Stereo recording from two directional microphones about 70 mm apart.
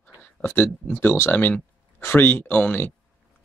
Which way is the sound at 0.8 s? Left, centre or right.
Left.